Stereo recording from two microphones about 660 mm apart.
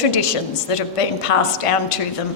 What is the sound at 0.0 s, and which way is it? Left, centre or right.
A woman's voice, left.